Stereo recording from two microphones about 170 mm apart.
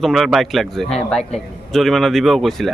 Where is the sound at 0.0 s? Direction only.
Centre (ahead or behind).